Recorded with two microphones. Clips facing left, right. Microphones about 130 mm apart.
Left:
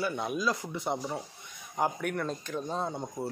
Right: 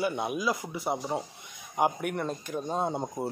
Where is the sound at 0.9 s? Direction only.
20° right (ahead or behind).